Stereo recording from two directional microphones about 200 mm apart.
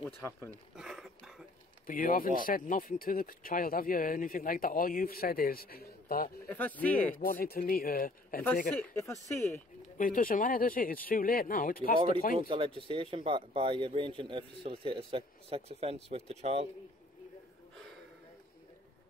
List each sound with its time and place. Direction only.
0.0 s speech: 10° left (ahead or behind)
0.7 s a sound: centre (ahead or behind)
1.9 s speech: 45° left (ahead or behind)
6.5 s speech: 10° left (ahead or behind)
7.2 s speech: 45° left (ahead or behind)
8.7 s speech: 15° left (ahead or behind)
9.9 s speech: 45° left (ahead or behind)
12.4 s speech: 25° right (ahead or behind)